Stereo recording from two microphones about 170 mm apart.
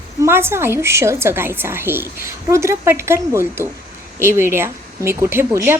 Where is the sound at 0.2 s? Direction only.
15° right (ahead or behind).